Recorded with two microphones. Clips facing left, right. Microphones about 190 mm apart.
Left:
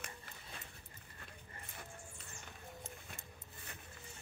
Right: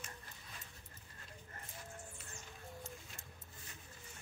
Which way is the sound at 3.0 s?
60° left (ahead or behind).